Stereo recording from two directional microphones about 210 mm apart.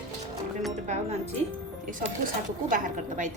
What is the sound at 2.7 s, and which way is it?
Speech, 40° right (ahead or behind).